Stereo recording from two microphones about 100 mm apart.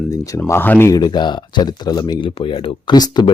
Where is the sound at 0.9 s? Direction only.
45° left (ahead or behind).